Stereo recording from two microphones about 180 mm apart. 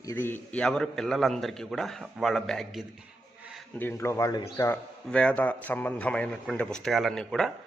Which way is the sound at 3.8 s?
15° left (ahead or behind).